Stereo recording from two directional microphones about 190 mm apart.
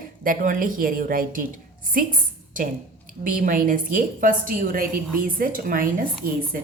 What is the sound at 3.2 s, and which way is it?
A woman's voice, 45° right (ahead or behind).